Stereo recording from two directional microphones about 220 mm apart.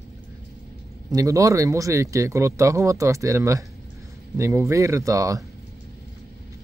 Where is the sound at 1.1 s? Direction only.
15° right (ahead or behind).